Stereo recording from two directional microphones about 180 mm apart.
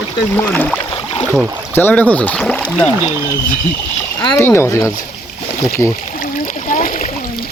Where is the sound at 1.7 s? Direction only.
10° left (ahead or behind).